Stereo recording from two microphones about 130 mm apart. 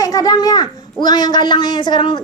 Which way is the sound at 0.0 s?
30° left (ahead or behind).